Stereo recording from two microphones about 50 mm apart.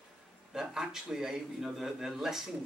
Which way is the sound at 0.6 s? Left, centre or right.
Centre.